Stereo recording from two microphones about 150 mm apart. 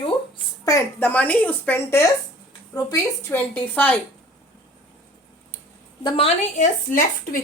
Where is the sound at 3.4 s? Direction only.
10° left (ahead or behind).